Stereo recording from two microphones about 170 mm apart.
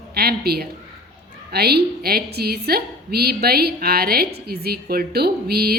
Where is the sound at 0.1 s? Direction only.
65° right (ahead or behind).